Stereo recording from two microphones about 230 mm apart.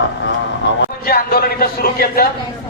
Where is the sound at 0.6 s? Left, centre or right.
Left.